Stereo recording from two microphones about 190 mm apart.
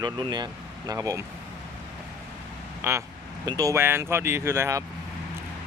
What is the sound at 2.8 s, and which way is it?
Quack, 15° right (ahead or behind).